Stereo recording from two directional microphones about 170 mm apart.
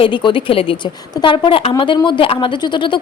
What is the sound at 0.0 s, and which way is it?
A woman's voice, 30° left (ahead or behind).